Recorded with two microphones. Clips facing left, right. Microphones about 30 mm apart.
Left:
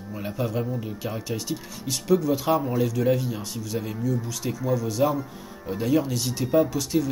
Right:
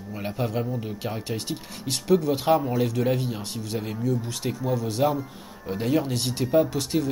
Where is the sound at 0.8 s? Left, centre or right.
Right.